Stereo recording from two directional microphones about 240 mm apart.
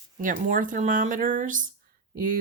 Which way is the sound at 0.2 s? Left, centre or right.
Right.